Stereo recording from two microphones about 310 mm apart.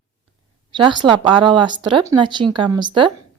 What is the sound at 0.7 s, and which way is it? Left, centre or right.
Speech, centre.